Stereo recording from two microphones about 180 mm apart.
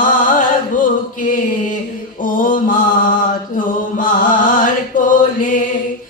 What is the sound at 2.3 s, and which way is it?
Mantra, 50° left (ahead or behind).